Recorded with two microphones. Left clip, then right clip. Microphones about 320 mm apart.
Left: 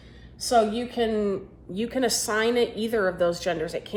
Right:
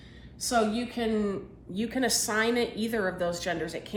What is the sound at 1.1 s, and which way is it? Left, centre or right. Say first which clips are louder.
Speech: left 4 dB; centre.